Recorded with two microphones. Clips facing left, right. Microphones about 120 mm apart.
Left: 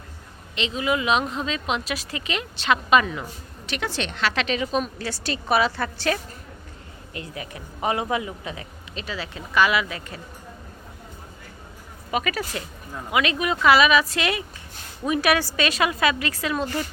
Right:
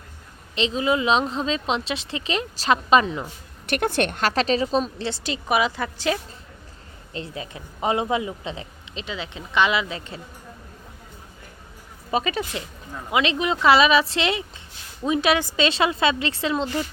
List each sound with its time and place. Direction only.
0.5 s a woman's voice: 30° right (ahead or behind)
3.7 s a woman's voice: 55° right (ahead or behind); by 10.2 s 25° right (ahead or behind)
12.1 s a woman's voice: 25° right (ahead or behind)